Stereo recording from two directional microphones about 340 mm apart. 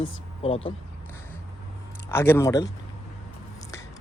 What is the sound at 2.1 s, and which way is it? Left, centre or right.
Speech, centre.